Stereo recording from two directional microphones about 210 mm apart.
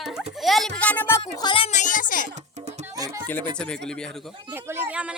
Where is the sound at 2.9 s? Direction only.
15° right (ahead or behind).